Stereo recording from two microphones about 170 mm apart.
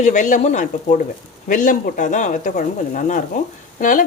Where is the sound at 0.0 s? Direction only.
45° left (ahead or behind).